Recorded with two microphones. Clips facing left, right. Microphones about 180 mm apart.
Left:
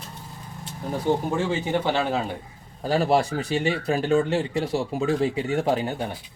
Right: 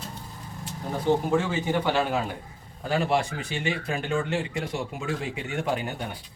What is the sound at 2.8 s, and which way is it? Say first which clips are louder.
Speech: left 4 dB; 35° left (ahead or behind).